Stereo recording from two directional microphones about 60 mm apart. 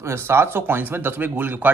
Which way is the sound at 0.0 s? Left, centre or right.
Right.